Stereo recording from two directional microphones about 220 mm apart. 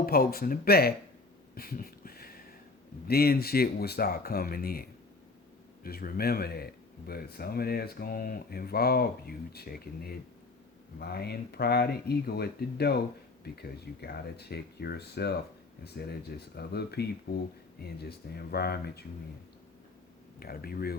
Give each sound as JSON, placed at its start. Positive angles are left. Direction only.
{"t": 0.0, "sound": "speech", "side_deg": 45}
{"t": 1.5, "sound": "a sound", "side_deg": 40}
{"t": 3.1, "sound": "speech", "side_deg": 45}
{"t": 20.4, "sound": "speech", "side_deg": 45}